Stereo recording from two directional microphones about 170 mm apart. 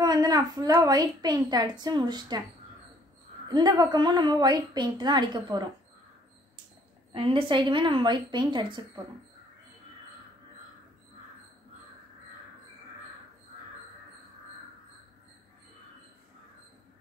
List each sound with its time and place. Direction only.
0.0 s a woman's voice: 20° right (ahead or behind)
3.4 s a woman's voice: 25° right (ahead or behind)
7.2 s a woman's voice: 30° right (ahead or behind)